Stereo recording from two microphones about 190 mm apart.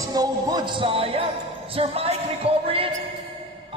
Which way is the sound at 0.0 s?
20° right (ahead or behind).